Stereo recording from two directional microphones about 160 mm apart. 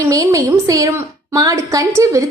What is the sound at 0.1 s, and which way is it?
A woman's voice, 20° right (ahead or behind).